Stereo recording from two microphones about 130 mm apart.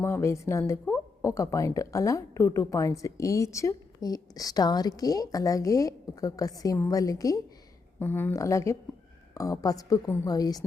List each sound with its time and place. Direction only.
0.0 s a woman's voice: 20° left (ahead or behind)
7.9 s a woman's voice: 15° left (ahead or behind)